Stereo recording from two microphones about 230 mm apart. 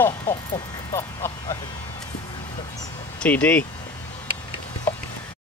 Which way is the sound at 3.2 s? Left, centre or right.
Centre.